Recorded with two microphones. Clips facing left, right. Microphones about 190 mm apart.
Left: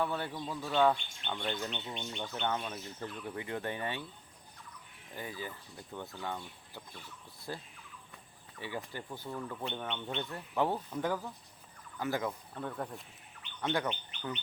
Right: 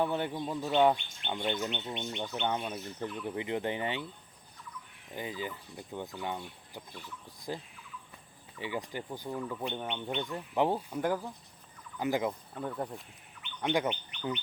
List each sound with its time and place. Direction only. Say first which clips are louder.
0.0 s speech: right 4 dB; 20° right (ahead or behind)
1.7 s speech: right 4 dB; 5° right (ahead or behind)
5.1 s speech: right 4 dB; 15° right (ahead or behind)